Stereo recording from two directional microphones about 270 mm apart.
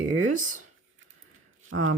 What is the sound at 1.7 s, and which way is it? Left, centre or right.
Speech, right.